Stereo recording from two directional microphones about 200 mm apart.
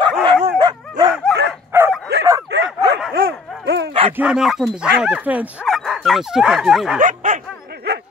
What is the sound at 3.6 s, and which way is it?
Dog, 60° right (ahead or behind).